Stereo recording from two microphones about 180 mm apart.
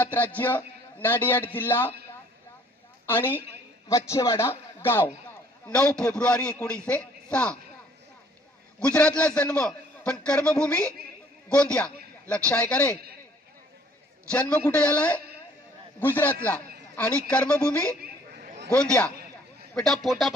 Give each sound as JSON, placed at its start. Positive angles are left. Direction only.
{"t": 0.0, "sound": "a man's voice", "side_deg": 10}
{"t": 3.1, "sound": "a man's voice", "side_deg": 10}
{"t": 8.9, "sound": "a man's voice", "side_deg": 5}
{"t": 14.3, "sound": "a man's voice", "side_deg": 5}
{"t": 18.0, "sound": "a sound", "side_deg": -55}
{"t": 18.7, "sound": "a man's voice", "side_deg": 5}